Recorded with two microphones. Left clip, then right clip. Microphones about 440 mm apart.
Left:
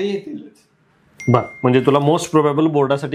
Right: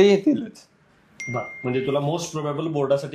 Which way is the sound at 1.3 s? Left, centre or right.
Left.